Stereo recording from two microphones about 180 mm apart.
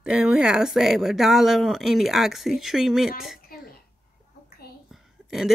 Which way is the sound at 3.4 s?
55° left (ahead or behind).